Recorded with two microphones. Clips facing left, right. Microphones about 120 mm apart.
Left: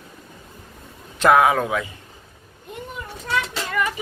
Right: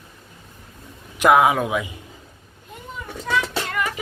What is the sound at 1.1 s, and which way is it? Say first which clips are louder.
Speech: even; 15° right (ahead or behind).